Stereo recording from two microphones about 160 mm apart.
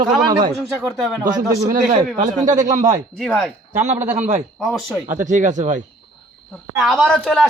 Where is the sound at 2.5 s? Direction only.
50° right (ahead or behind).